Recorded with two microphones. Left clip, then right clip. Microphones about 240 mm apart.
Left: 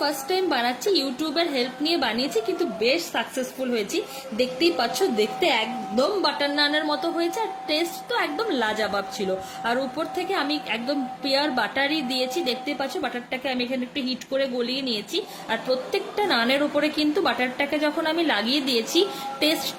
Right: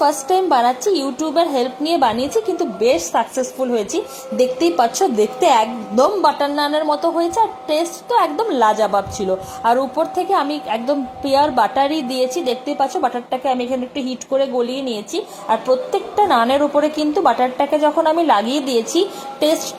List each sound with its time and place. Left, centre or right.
0.3 s a woman's voice: centre
13.9 s a woman's voice: centre